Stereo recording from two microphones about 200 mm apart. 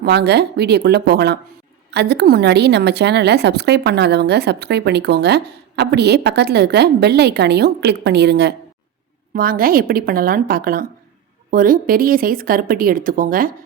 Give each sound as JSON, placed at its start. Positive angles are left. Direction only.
{"t": 0.0, "sound": "a woman's voice", "side_deg": -55}
{"t": 9.3, "sound": "speech", "side_deg": -45}